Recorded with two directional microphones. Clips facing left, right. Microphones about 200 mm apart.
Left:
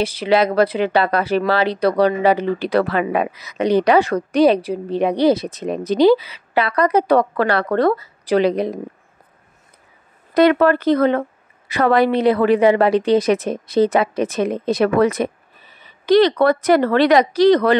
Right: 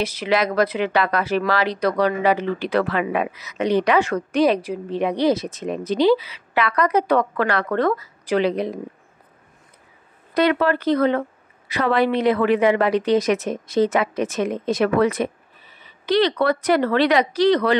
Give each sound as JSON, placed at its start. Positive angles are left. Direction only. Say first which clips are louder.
{"t": 0.0, "sound": "speech", "louder": "left 4 dB", "side_deg": 30}
{"t": 10.3, "sound": "speech", "louder": "left 5 dB", "side_deg": 50}